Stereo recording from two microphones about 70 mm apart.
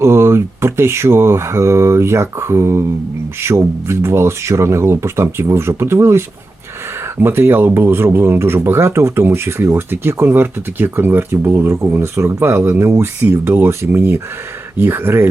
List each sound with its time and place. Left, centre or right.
0.0 s speech: right